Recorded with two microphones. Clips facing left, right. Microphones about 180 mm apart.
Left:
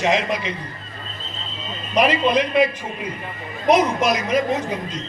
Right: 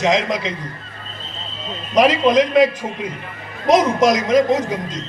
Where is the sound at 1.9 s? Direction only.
90° right.